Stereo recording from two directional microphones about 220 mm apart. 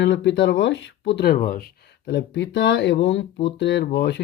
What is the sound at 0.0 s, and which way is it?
Speech, 55° left (ahead or behind).